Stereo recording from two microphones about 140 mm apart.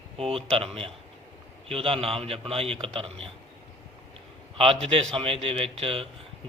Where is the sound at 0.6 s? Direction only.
40° right (ahead or behind).